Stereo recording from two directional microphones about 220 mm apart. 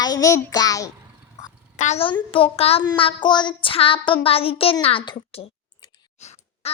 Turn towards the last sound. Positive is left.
turn(degrees=30)  # may be behind; listen again after turning